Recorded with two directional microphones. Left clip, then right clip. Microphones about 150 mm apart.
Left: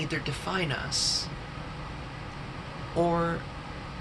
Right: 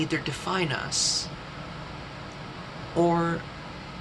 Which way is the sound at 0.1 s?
10° right (ahead or behind).